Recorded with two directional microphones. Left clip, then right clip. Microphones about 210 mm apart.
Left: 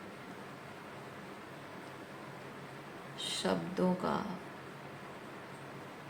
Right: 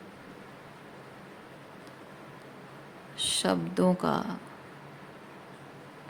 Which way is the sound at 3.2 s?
55° right (ahead or behind).